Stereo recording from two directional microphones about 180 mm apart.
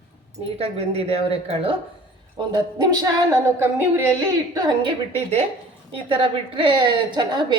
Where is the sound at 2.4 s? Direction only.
25° right (ahead or behind).